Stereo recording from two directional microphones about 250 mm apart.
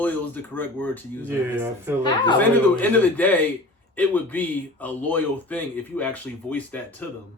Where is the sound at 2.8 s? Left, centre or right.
Centre.